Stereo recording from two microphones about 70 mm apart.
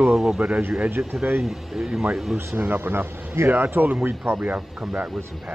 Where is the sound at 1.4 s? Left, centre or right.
Centre.